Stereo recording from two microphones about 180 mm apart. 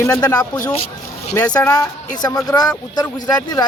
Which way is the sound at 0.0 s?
15° left (ahead or behind).